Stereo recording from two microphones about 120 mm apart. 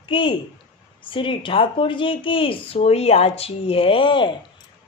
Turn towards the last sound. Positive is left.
turn(degrees=45)  # may be behind; listen again after turning